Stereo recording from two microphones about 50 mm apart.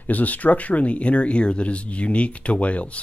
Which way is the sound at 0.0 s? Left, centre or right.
Left.